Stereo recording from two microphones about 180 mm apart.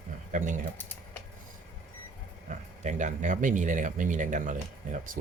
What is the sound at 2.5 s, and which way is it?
Speech, 40° right (ahead or behind).